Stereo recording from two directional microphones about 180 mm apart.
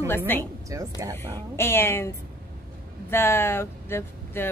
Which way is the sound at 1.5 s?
15° left (ahead or behind).